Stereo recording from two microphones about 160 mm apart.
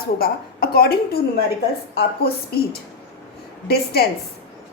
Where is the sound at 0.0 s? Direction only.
70° left (ahead or behind).